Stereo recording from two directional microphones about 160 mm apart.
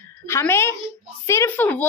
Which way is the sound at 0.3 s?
15° left (ahead or behind).